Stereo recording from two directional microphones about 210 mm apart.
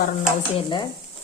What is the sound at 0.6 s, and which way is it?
Speech, 25° left (ahead or behind).